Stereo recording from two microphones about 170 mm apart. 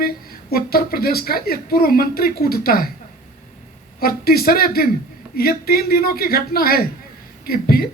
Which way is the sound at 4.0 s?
60° left (ahead or behind).